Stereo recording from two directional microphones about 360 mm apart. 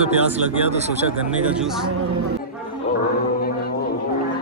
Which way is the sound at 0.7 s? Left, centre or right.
Centre.